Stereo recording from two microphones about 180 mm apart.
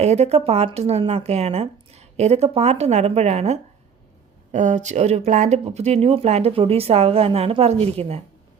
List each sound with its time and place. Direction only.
0.0 s speech: 40° right (ahead or behind)